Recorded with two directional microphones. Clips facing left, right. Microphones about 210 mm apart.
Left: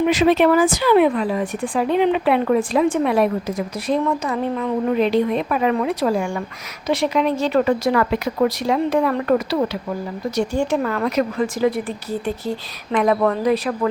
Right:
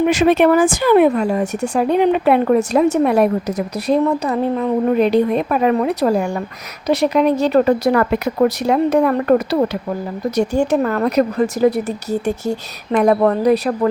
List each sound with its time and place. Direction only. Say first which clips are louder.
0.0 s speech: right 2 dB; 55° right (ahead or behind)